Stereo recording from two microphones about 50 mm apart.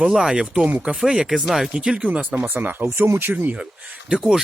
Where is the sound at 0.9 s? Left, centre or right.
Right.